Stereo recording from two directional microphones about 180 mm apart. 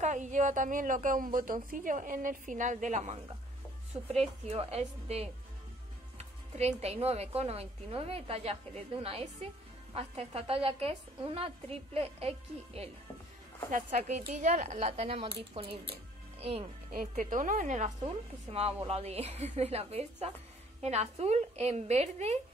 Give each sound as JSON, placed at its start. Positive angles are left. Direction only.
{"t": 0.0, "sound": "a woman's voice", "side_deg": -45}
{"t": 16.9, "sound": "a woman's voice", "side_deg": -50}